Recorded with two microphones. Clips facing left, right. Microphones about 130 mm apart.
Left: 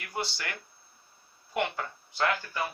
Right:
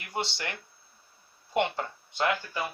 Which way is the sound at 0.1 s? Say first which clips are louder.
Right 2 dB; 25° right (ahead or behind).